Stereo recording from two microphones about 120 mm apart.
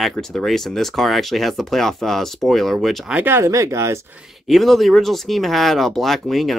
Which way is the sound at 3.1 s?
20° right (ahead or behind).